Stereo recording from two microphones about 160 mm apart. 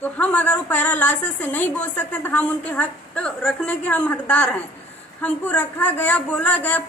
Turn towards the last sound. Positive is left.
turn(degrees=10)  # may be behind; listen again after turning